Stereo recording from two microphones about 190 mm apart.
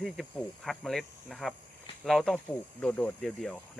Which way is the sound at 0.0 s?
Centre (ahead or behind).